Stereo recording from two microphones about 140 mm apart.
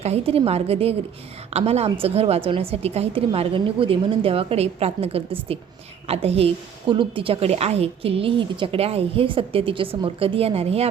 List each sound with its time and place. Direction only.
0.0 s a woman's voice: 45° right (ahead or behind)